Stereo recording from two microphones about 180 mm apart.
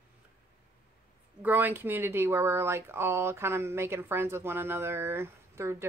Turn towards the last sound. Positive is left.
turn(degrees=-15)  # may be behind; listen again after turning